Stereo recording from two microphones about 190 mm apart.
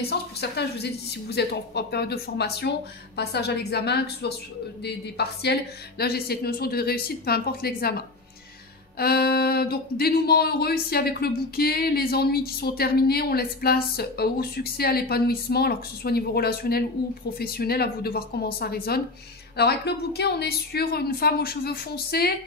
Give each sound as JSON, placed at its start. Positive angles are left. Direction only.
{"t": 0.0, "sound": "speech", "side_deg": 60}
{"t": 8.9, "sound": "speech", "side_deg": 55}